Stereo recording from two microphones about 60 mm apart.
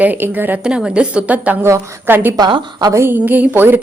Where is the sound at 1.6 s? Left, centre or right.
Right.